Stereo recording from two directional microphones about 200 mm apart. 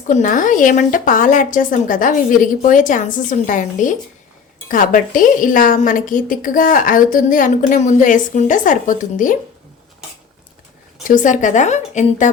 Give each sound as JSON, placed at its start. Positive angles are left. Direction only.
{"t": 0.1, "sound": "a woman's voice", "side_deg": 40}
{"t": 11.0, "sound": "a woman's voice", "side_deg": 40}